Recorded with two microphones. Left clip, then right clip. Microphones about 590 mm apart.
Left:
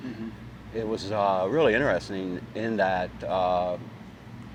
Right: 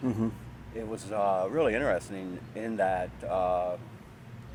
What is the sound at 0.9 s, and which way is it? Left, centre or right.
Speech, left.